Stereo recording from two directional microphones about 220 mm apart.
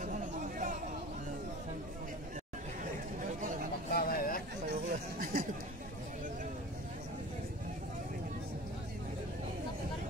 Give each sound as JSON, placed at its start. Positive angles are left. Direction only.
{"t": 0.0, "sound": "chatter", "side_deg": -35}
{"t": 3.9, "sound": "a sound", "side_deg": 40}
{"t": 4.6, "sound": "chatter", "side_deg": -40}